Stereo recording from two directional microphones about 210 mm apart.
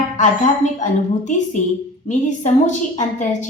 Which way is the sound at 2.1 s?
35° left (ahead or behind).